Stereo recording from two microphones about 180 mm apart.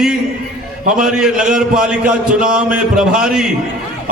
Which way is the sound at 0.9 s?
5° right (ahead or behind).